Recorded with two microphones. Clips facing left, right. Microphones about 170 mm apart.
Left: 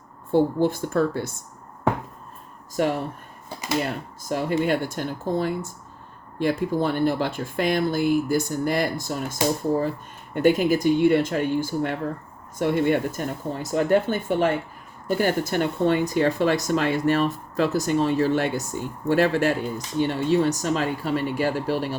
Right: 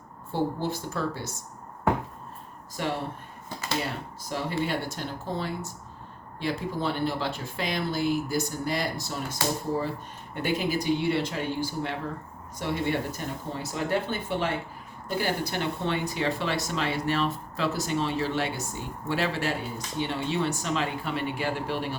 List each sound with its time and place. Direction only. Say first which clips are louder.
0.3 s speech: left 8 dB; 55° left (ahead or behind)
2.8 s speech: left 8 dB; 45° left (ahead or behind)
4.2 s speech: left 6 dB; 50° left (ahead or behind)